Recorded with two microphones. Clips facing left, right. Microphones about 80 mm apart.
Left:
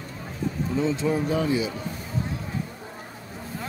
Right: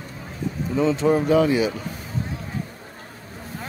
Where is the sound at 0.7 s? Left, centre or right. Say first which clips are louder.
Right 6 dB; right.